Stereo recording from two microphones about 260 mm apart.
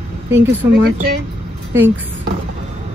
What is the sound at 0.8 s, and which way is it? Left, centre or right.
Speech, right.